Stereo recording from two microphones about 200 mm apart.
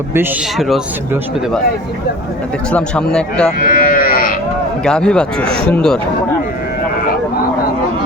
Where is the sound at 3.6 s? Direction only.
45° left (ahead or behind).